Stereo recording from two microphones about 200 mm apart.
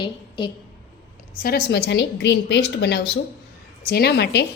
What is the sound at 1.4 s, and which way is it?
A woman's voice, 50° left (ahead or behind).